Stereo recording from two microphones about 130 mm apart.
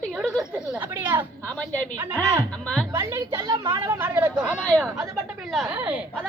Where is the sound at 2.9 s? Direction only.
20° right (ahead or behind).